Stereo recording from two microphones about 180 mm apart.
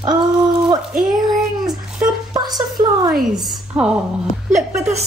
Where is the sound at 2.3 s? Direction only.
20° right (ahead or behind).